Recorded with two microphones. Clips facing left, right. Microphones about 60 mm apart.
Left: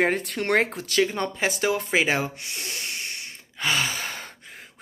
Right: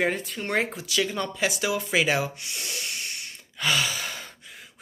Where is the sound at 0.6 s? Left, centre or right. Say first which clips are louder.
Left 4 dB; left.